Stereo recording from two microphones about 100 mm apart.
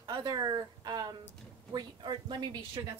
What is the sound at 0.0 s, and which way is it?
A woman's voice, 45° right (ahead or behind).